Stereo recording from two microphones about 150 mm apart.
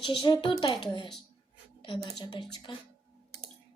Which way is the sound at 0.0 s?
35° left (ahead or behind).